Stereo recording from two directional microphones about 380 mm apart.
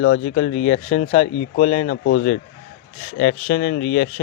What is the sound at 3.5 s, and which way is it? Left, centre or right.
Speech, left.